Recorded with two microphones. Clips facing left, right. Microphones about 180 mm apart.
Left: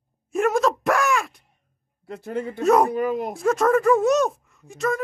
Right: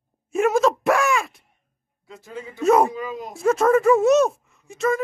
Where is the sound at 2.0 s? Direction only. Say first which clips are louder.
Left 7 dB; 60° left (ahead or behind).